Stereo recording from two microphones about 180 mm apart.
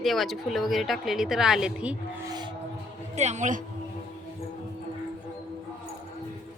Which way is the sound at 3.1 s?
40° right (ahead or behind).